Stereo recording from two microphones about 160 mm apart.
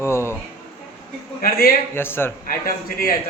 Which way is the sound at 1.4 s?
65° left (ahead or behind).